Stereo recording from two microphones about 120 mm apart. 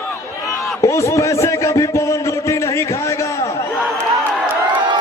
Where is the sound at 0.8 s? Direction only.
25° left (ahead or behind).